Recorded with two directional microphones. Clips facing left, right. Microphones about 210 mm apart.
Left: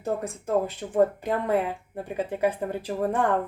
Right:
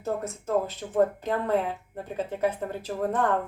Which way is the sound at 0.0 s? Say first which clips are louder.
Left 1 dB; 15° left (ahead or behind).